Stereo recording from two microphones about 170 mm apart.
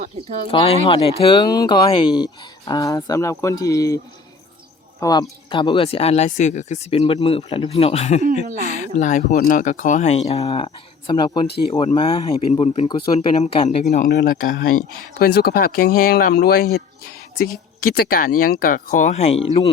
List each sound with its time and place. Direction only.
0.0 s speech: 40° right (ahead or behind)
0.4 s speech: 35° left (ahead or behind)
11.4 s speech: 75° left (ahead or behind)
11.9 s speech: 35° left (ahead or behind)
14.3 s speech: 55° left (ahead or behind)
15.2 s speech: 65° left (ahead or behind)
17.8 s speech: 60° left (ahead or behind); by 19.3 s 45° left (ahead or behind)